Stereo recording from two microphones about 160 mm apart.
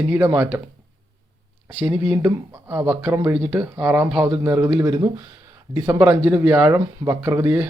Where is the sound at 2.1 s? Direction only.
15° right (ahead or behind).